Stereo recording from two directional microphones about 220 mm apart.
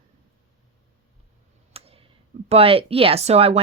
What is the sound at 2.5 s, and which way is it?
Speech, 25° right (ahead or behind).